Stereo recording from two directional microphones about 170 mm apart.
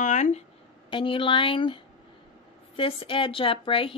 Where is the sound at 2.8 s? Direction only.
30° left (ahead or behind).